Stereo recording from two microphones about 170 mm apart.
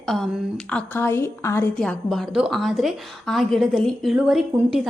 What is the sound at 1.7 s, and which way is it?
Speech, 5° left (ahead or behind).